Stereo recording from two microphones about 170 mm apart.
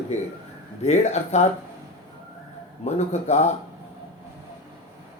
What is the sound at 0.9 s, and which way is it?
Speech, 40° left (ahead or behind).